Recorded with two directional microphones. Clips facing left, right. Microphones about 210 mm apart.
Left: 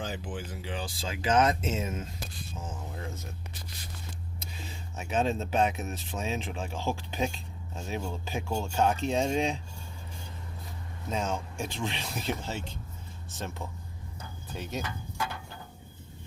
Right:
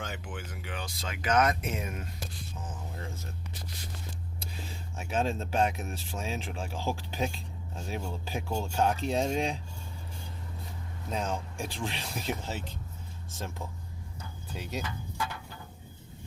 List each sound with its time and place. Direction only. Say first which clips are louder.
0.0 s speech: left 3 dB; 35° left (ahead or behind)
4.9 s speech: left 2 dB; centre (ahead or behind)
11.1 s speech: left 1 dB; centre (ahead or behind)